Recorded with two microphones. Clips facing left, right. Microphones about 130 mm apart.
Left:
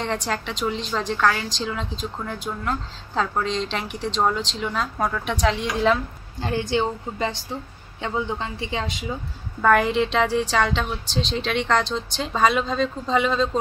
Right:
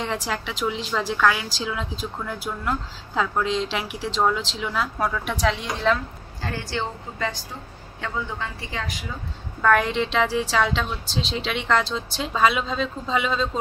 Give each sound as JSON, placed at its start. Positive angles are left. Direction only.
{"t": 0.0, "sound": "a woman's voice", "side_deg": -5}
{"t": 6.4, "sound": "a woman's voice", "side_deg": 20}
{"t": 9.6, "sound": "a woman's voice", "side_deg": 0}